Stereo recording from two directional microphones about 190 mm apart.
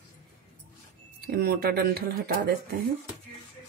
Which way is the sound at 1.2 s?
55° right (ahead or behind).